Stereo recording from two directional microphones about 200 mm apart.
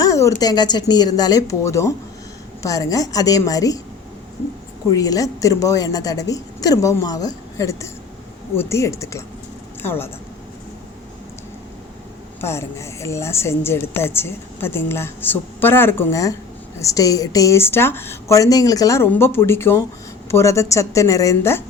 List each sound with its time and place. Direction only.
0.0 s a woman's voice: 15° left (ahead or behind)
4.9 s a woman's voice: 15° left (ahead or behind)
12.4 s a woman's voice: 15° left (ahead or behind)